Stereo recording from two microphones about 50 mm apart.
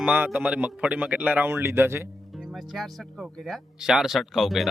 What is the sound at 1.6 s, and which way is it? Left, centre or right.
Speech, right.